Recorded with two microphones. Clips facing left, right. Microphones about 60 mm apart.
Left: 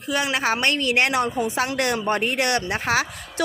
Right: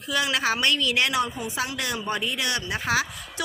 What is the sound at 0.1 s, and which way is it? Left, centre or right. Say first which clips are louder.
A woman's voice: left 2 dB; left.